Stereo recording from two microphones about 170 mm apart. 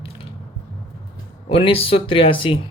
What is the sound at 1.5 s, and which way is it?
Speech, 30° left (ahead or behind).